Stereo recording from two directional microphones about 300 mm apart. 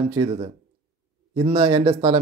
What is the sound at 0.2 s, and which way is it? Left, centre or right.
A man's voice, centre.